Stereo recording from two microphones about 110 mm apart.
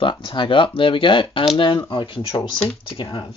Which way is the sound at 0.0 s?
50° left (ahead or behind).